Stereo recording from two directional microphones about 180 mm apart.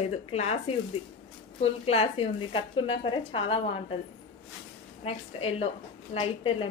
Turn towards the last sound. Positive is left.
turn(degrees=30)  # may be behind; listen again after turning